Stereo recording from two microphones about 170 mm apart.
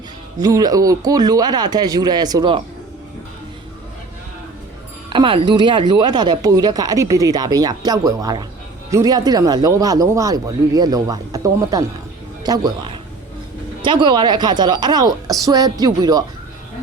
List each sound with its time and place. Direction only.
0.4 s speech: 20° right (ahead or behind)
5.0 s a woman's voice: 30° right (ahead or behind)
13.8 s speech: 25° right (ahead or behind)